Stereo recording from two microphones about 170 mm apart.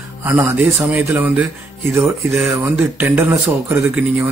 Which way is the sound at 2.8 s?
10° right (ahead or behind).